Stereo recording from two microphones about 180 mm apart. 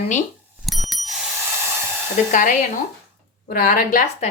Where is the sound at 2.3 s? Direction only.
45° left (ahead or behind).